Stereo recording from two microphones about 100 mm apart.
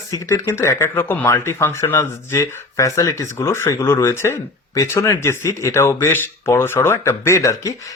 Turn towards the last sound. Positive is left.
turn(degrees=30)  # may be behind; listen again after turning